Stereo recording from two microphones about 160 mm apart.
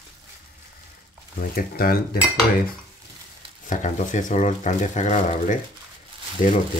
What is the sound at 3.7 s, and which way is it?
Speech, 50° left (ahead or behind).